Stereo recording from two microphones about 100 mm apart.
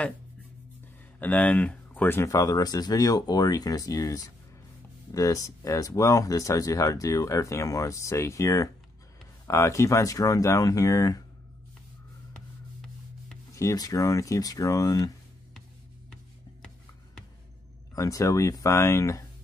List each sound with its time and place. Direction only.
1.2 s speech: 15° left (ahead or behind)
2.2 s speech: 35° left (ahead or behind)
13.6 s speech: 35° left (ahead or behind)
17.9 s speech: 35° left (ahead or behind)